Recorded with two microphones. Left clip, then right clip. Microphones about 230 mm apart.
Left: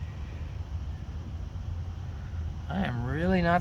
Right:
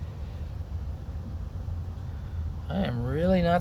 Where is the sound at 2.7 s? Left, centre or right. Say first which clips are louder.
Right 2 dB; centre.